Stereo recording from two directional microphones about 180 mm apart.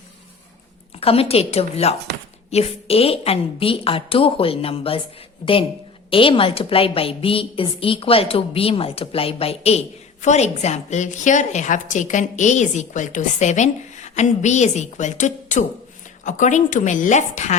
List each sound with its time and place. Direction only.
0.9 s a woman's voice: 35° left (ahead or behind)
6.1 s a woman's voice: 30° left (ahead or behind)